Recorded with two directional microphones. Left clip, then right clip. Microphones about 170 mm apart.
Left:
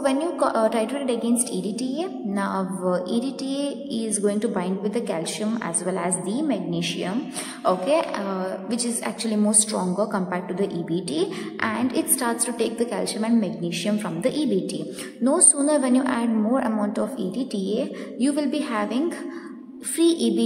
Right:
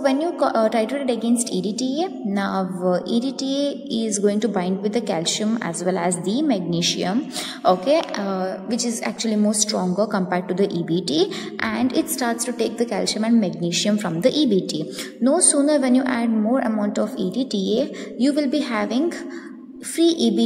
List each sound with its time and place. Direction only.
0.0 s a woman's voice: 15° right (ahead or behind)